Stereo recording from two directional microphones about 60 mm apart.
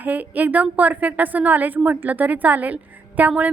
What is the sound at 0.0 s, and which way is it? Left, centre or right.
A woman's voice, right.